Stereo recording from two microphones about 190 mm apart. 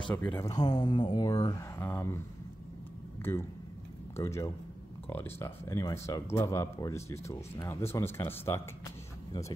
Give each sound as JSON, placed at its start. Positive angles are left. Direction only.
{"t": 0.1, "sound": "speech", "side_deg": 10}
{"t": 4.2, "sound": "speech", "side_deg": 15}